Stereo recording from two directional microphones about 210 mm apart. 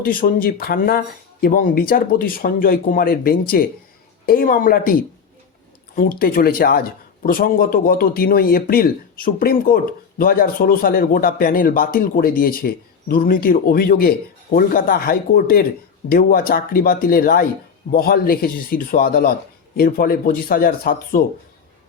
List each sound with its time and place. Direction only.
0.0 s speech: 40° left (ahead or behind)
6.0 s speech: 40° left (ahead or behind)